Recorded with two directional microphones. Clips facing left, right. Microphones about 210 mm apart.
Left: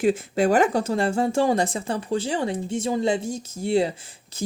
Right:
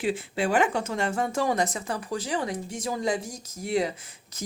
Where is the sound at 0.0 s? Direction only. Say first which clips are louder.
Left 6 dB; 45° left (ahead or behind).